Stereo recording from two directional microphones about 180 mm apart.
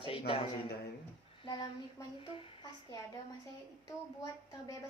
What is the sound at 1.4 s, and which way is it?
Speech, 25° left (ahead or behind).